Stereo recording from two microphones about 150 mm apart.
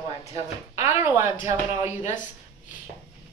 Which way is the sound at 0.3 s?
20° right (ahead or behind).